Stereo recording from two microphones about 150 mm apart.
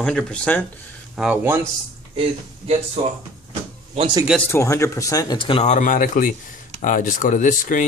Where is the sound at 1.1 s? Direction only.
10° right (ahead or behind).